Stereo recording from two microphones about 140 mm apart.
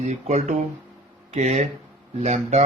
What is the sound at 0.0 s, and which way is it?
Speech, 55° right (ahead or behind).